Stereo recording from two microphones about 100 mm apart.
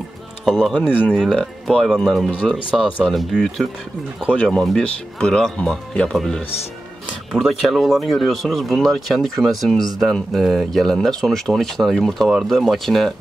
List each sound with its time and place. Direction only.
0.5 s speech: 5° right (ahead or behind)
0.7 s speech: 20° left (ahead or behind)
1.3 s speech: 5° left (ahead or behind)